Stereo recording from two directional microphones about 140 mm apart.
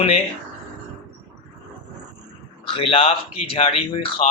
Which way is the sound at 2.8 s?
45° left (ahead or behind).